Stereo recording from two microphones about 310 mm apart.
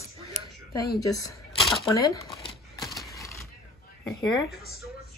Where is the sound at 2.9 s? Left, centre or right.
Centre.